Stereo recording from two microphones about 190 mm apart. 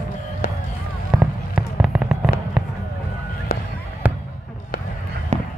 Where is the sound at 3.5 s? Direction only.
50° left (ahead or behind).